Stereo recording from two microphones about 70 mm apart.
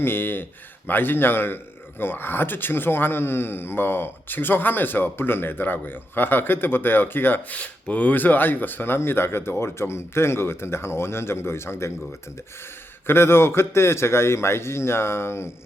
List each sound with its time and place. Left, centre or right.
0.0 s speech: left
13.1 s speech: left